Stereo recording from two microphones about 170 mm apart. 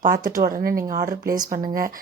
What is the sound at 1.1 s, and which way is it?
Speech, 20° right (ahead or behind).